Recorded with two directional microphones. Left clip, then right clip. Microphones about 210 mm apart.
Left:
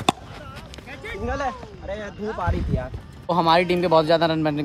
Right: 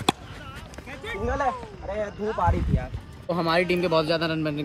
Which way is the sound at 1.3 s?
30° right (ahead or behind).